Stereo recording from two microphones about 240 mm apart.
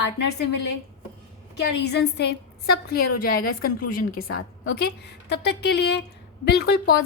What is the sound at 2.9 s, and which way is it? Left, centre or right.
Speech, left.